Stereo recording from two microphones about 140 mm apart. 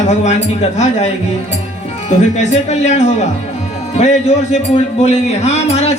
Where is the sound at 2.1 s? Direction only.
55° left (ahead or behind).